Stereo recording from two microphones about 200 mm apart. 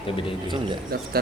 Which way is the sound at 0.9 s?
50° right (ahead or behind).